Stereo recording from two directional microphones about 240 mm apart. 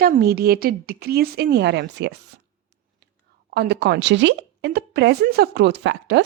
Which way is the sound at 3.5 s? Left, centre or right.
Right.